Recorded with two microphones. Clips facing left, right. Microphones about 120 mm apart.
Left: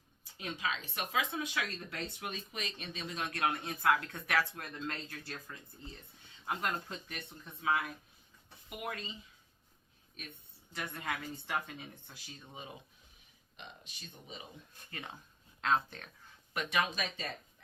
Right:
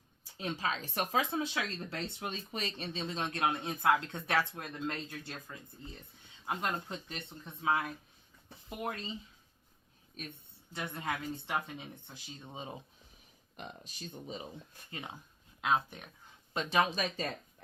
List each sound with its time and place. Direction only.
0.3 s speech: 30° right (ahead or behind)
8.8 s speech: 30° right (ahead or behind)
10.2 s speech: 40° right (ahead or behind)
10.7 s speech: 25° right (ahead or behind)
13.6 s speech: 40° right (ahead or behind)
14.8 s speech: 20° right (ahead or behind)
16.6 s speech: 30° right (ahead or behind)